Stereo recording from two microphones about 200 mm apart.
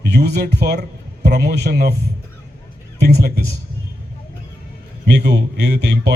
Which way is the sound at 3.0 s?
55° right (ahead or behind).